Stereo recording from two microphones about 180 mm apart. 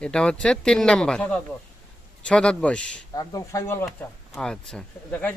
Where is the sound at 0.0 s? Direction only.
5° left (ahead or behind).